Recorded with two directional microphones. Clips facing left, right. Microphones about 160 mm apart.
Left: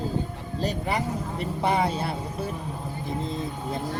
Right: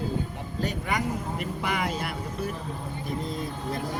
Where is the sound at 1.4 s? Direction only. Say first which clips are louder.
Left 8 dB; 30° left (ahead or behind).